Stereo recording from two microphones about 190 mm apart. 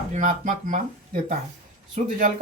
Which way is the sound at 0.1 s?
40° right (ahead or behind).